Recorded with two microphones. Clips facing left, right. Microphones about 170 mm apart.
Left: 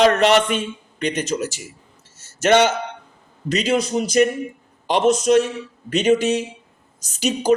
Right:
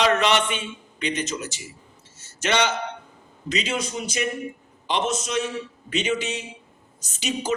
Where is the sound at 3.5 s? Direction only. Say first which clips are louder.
Left 8 dB; 35° left (ahead or behind).